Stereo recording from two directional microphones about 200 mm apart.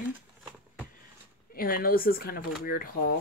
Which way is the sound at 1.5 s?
45° left (ahead or behind).